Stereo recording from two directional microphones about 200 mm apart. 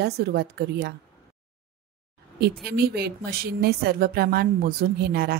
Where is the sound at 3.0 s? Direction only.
50° right (ahead or behind).